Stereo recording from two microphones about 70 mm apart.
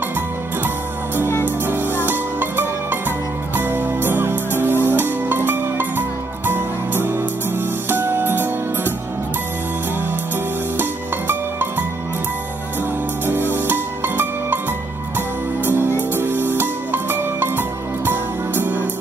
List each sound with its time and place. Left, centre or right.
1.6 s music: right
11.3 s music: right
13.2 s music: right
15.6 s music: right